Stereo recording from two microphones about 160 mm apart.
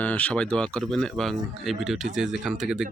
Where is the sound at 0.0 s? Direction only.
10° left (ahead or behind).